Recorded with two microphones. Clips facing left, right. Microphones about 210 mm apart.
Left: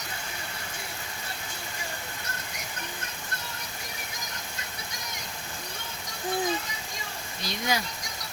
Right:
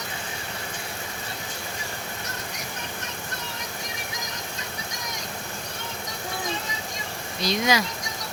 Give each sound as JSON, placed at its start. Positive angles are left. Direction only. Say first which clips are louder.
{"t": 7.4, "sound": "speech", "louder": "right 7 dB", "side_deg": -90}